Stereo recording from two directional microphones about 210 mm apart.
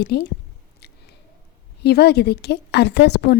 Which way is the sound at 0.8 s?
50° left (ahead or behind).